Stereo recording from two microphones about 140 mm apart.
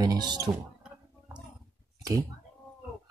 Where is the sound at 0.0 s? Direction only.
30° right (ahead or behind).